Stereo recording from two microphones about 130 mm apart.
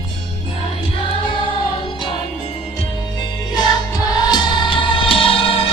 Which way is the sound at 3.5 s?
30° left (ahead or behind).